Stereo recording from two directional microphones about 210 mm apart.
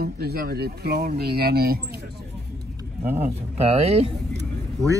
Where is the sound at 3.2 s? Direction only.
30° right (ahead or behind).